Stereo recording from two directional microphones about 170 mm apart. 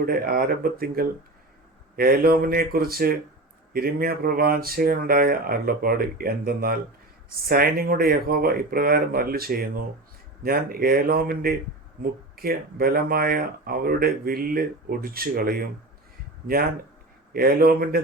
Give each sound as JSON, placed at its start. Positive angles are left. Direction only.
{"t": 0.0, "sound": "speech", "side_deg": -60}
{"t": 17.3, "sound": "speech", "side_deg": -60}